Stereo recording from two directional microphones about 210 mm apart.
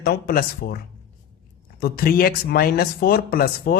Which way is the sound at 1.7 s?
45° left (ahead or behind).